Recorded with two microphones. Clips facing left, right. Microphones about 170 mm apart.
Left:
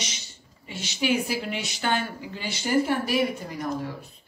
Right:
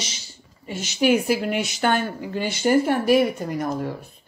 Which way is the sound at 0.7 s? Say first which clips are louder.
Right 6 dB; 50° right (ahead or behind).